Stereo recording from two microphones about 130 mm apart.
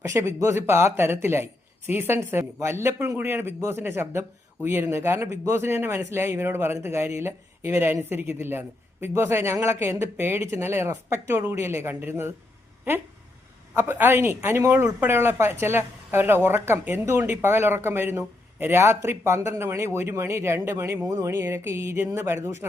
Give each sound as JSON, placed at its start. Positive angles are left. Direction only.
{"t": 0.0, "sound": "speech", "side_deg": -20}
{"t": 13.7, "sound": "speech", "side_deg": -15}